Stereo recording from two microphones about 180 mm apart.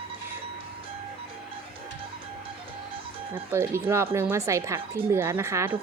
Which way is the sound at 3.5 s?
15° right (ahead or behind).